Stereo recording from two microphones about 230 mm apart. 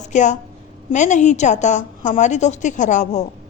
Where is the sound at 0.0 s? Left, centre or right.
Left.